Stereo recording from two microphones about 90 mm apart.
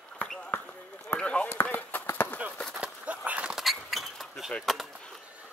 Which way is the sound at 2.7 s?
15° right (ahead or behind).